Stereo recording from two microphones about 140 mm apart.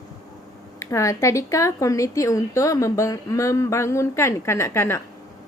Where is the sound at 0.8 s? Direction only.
20° left (ahead or behind).